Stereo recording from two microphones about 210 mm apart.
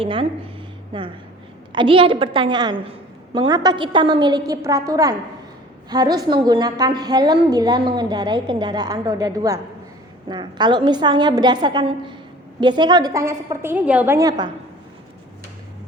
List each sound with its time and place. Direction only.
0.0 s a woman's voice: 25° right (ahead or behind)